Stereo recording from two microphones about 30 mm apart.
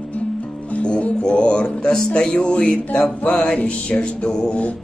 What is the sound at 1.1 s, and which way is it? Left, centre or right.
Music, left.